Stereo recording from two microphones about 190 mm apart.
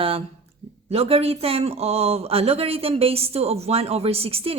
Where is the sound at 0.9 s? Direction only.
30° right (ahead or behind).